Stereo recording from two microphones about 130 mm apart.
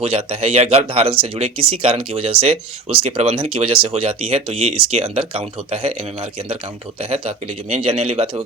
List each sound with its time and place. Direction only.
0.0 s speech: 50° right (ahead or behind)
7.0 s speech: 50° right (ahead or behind)